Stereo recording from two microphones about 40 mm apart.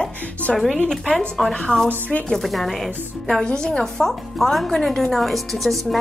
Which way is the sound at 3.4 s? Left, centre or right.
Centre.